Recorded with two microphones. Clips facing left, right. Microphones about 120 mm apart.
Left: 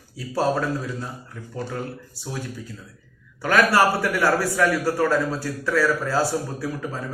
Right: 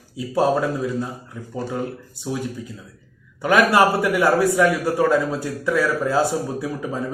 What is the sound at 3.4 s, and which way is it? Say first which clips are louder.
A man's voice: right 2 dB; 20° right (ahead or behind).